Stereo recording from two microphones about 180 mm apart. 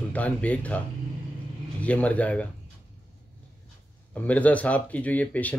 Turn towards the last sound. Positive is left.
turn(degrees=10)  # may be behind; listen again after turning